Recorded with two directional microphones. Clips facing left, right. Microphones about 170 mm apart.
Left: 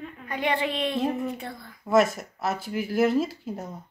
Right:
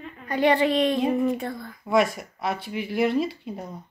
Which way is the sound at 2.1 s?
Centre (ahead or behind).